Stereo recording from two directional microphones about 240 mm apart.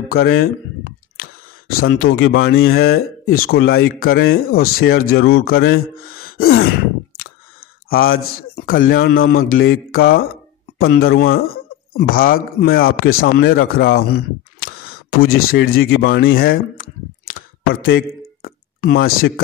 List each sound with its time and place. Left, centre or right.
0.1 s camera: left
1.8 s speech: left
3.3 s speech: left
3.6 s speech: left
5.9 s gasp: left
6.4 s speech: left
7.9 s speech: left
8.2 s speech: left
8.5 s speech: left
17.3 s a sound: left
18.9 s speech: left